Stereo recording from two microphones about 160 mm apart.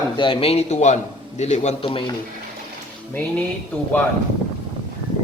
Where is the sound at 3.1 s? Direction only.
10° left (ahead or behind).